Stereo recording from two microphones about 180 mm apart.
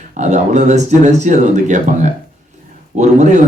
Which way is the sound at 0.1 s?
40° right (ahead or behind).